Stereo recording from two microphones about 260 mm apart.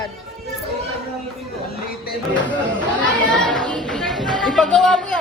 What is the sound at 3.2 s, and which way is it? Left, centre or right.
Chatter, centre.